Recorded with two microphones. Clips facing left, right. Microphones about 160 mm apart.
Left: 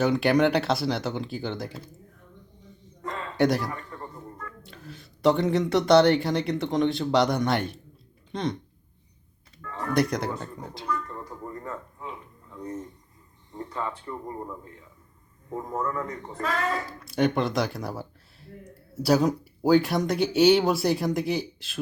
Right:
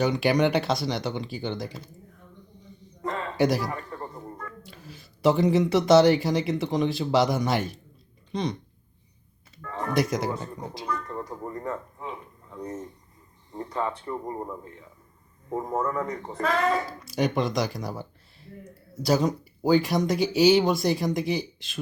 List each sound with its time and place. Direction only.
0.0 s speech: centre (ahead or behind)
3.0 s a sound: 30° right (ahead or behind)
3.3 s speech: centre (ahead or behind)
3.7 s a sound: 30° right (ahead or behind)
4.4 s speech: 5° right (ahead or behind)
9.6 s music: 25° right (ahead or behind)
9.9 s speech: centre (ahead or behind)
11.1 s a sound: 20° right (ahead or behind)
13.5 s speech: 30° right (ahead or behind)
15.4 s speech: 20° right (ahead or behind)
17.0 s speech: centre (ahead or behind)